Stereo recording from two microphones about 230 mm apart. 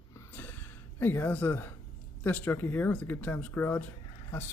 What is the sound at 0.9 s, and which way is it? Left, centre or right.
Speech, centre.